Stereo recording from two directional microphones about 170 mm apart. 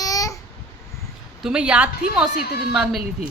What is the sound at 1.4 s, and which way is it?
Speech, 5° right (ahead or behind).